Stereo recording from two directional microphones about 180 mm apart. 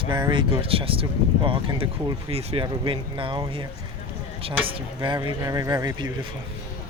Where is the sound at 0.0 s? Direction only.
25° right (ahead or behind).